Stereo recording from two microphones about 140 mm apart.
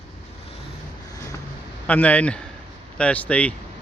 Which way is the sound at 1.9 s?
10° left (ahead or behind).